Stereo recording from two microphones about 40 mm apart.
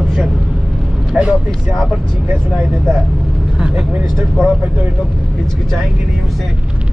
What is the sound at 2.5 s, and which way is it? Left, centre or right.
Speech, centre.